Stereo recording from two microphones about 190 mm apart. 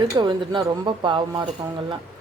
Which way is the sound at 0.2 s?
25° right (ahead or behind).